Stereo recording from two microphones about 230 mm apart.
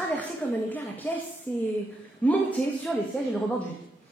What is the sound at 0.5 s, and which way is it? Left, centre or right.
Speech, centre.